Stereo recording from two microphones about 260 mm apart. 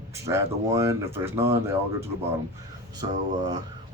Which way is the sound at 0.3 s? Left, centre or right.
Centre.